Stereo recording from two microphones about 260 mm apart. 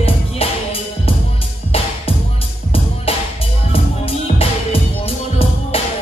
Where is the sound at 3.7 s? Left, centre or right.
Left.